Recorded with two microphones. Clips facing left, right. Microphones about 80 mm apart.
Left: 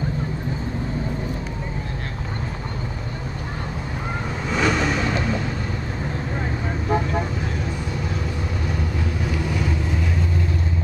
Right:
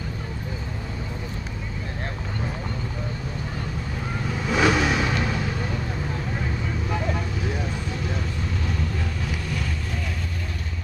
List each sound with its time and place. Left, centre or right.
4.5 s vehicle: centre